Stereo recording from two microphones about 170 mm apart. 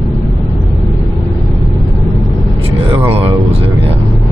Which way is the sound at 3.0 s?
35° right (ahead or behind).